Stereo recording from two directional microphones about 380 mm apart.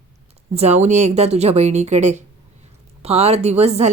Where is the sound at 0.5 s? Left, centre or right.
Centre.